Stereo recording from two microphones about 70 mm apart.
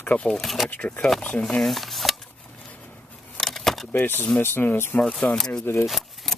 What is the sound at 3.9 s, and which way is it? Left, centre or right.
Speech, left.